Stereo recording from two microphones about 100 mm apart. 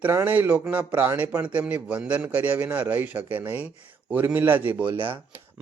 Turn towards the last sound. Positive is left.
turn(degrees=-15)  # may be behind; listen again after turning